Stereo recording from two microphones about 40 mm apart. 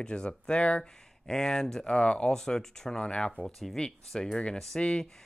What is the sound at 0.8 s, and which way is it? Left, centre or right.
Speech, centre.